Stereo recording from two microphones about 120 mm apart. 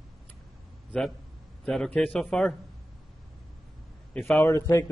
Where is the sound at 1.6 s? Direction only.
10° left (ahead or behind).